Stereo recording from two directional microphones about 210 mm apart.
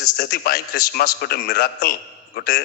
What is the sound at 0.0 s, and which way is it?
A man's voice, 45° left (ahead or behind).